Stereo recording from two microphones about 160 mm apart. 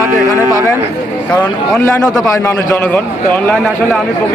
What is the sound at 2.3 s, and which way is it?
A man's voice, 20° left (ahead or behind).